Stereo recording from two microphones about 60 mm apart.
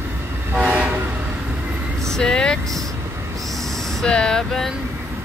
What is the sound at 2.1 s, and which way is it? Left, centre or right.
Vehicle, centre.